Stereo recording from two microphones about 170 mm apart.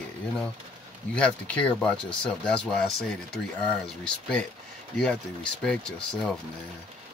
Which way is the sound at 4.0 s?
5° left (ahead or behind).